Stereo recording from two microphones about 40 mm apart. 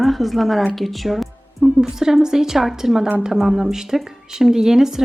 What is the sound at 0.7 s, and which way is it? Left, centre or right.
Music, centre.